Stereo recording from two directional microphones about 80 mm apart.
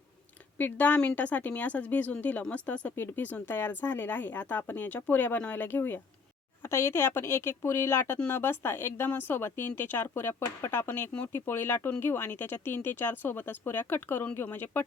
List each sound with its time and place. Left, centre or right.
0.6 s speech: left
6.6 s speech: left